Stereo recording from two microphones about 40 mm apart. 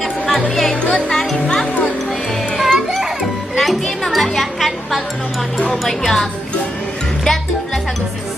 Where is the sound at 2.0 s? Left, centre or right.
Centre.